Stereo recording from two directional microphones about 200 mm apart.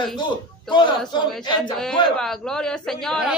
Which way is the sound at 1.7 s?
Centre (ahead or behind).